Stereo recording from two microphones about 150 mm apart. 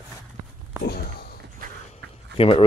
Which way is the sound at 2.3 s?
40° left (ahead or behind).